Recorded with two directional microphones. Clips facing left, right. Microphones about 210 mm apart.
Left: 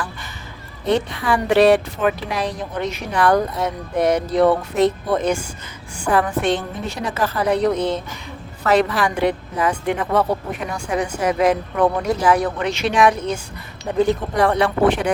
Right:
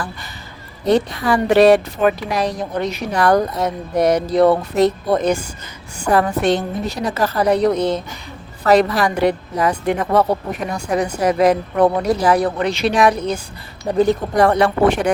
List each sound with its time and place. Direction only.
0.9 s speech: 40° right (ahead or behind)